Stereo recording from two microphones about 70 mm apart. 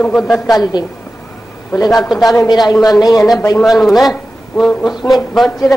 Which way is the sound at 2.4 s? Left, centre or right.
Left.